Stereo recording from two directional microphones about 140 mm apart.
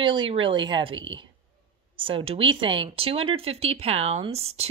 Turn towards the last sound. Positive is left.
turn(degrees=-45)  # may be behind; listen again after turning